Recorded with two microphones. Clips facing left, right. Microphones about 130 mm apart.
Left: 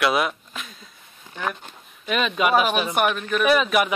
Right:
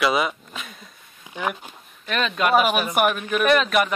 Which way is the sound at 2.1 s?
5° left (ahead or behind).